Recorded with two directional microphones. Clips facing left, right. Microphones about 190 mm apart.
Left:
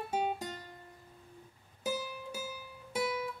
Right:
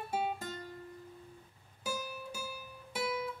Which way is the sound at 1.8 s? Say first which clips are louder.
Left 3 dB; 20° left (ahead or behind).